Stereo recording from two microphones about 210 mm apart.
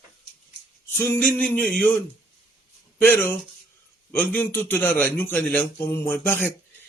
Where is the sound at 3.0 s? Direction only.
10° left (ahead or behind).